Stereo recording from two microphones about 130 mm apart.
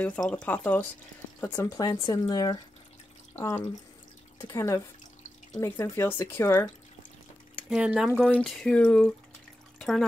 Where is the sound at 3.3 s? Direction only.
20° left (ahead or behind).